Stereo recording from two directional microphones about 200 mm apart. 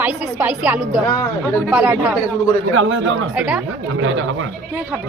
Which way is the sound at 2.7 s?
85° right.